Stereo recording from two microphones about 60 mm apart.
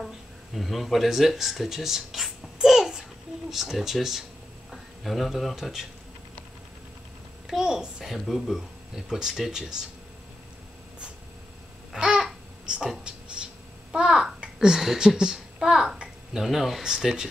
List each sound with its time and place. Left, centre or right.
0.6 s speech: centre
7.4 s a child's voice: centre
8.9 s speech: centre
11.9 s babbling: centre
13.0 s a sound: centre
13.9 s a child's voice: centre